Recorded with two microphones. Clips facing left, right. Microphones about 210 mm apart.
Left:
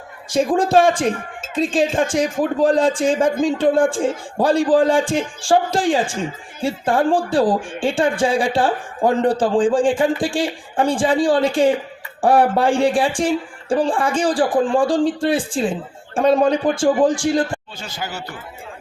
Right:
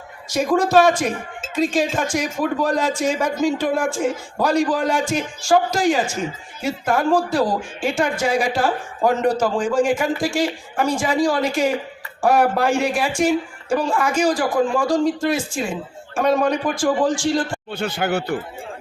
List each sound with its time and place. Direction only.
0.3 s speech: 30° left (ahead or behind)
17.7 s speech: 60° right (ahead or behind)